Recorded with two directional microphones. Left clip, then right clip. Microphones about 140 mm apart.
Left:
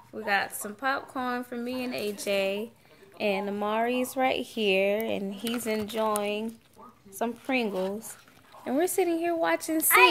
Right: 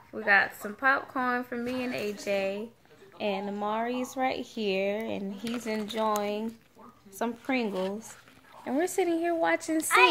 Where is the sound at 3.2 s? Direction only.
45° left (ahead or behind).